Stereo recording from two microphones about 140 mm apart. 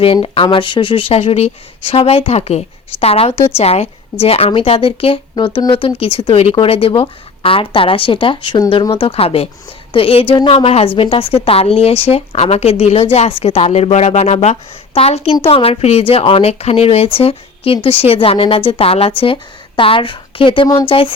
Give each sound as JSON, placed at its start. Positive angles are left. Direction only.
{"t": 0.0, "sound": "speech", "side_deg": 40}